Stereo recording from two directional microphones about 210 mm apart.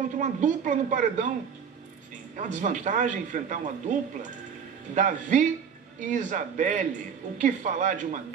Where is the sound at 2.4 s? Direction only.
35° right (ahead or behind).